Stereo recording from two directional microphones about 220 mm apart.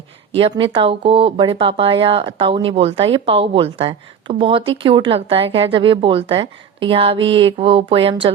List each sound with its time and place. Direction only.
0.3 s speech: 25° right (ahead or behind)